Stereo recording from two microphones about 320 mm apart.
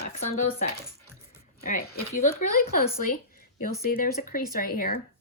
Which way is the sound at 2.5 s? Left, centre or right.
Left.